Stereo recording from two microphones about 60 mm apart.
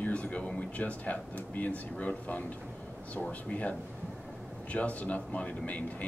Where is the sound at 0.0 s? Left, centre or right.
Left.